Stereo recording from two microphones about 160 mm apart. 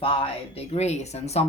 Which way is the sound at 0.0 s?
35° left (ahead or behind).